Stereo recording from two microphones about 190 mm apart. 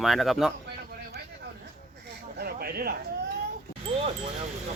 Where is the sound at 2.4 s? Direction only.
55° right (ahead or behind).